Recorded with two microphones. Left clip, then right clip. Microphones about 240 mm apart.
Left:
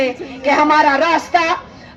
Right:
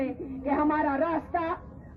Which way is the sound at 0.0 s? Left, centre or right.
Left.